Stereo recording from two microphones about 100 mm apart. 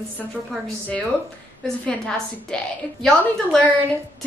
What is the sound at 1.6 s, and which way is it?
Speech, 5° left (ahead or behind).